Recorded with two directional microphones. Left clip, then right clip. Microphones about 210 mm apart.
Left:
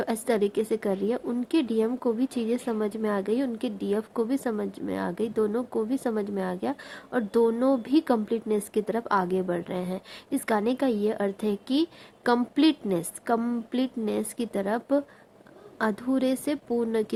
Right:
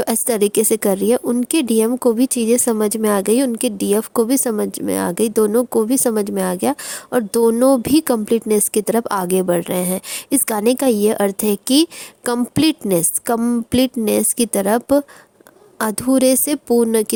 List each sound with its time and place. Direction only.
0.0 s a woman's voice: 55° right (ahead or behind)